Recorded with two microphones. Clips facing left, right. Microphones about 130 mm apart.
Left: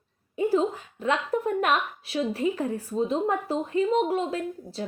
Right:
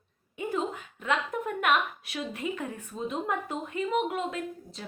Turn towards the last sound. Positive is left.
turn(degrees=35)  # may be behind; listen again after turning